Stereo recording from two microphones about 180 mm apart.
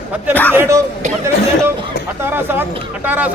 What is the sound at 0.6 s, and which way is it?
Speech, 15° right (ahead or behind).